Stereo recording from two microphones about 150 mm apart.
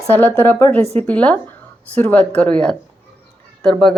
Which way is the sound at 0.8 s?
45° right (ahead or behind).